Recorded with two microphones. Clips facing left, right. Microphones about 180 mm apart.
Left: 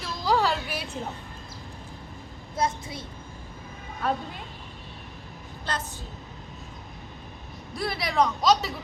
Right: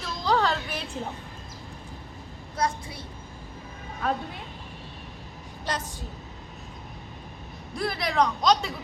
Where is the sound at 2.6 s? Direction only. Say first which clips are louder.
Even; 20° left (ahead or behind).